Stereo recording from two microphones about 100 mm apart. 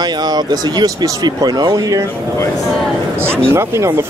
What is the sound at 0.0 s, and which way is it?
Speech, 45° right (ahead or behind).